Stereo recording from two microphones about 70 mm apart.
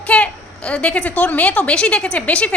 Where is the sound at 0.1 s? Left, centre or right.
Centre.